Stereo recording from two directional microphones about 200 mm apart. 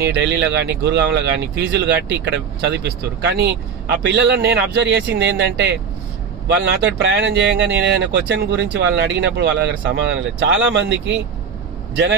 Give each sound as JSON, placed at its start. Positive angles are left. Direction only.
{"t": 0.0, "sound": "speech", "side_deg": -55}